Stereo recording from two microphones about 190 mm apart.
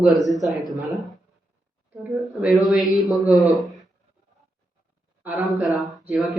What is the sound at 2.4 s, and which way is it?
Speech, centre (ahead or behind).